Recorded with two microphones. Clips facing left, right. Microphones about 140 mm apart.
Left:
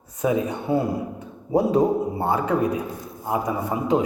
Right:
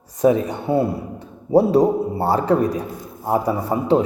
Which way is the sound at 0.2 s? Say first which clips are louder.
Right 6 dB; 30° right (ahead or behind).